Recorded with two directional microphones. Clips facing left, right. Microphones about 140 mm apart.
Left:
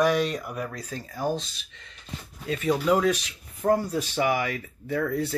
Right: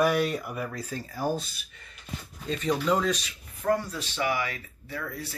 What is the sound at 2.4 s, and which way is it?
Speech, 5° left (ahead or behind).